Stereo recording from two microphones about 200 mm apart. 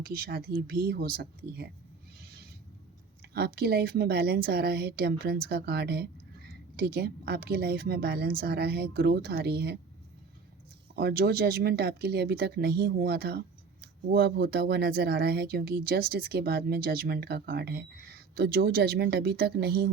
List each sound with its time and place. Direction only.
0.0 s speech: 50° right (ahead or behind)
3.3 s speech: 50° right (ahead or behind)
10.9 s speech: 50° right (ahead or behind)